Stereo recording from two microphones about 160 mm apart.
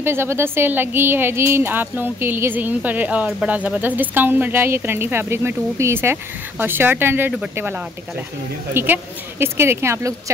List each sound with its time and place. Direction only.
0.0 s speech: 15° right (ahead or behind)